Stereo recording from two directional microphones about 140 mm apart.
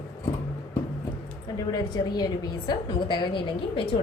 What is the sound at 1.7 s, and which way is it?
A woman's voice, 30° left (ahead or behind).